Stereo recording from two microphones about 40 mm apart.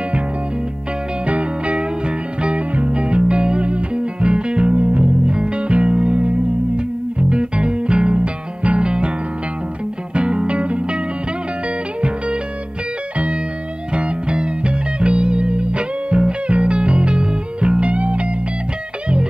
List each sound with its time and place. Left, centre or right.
1.2 s music: right
10.1 s music: right
13.9 s music: right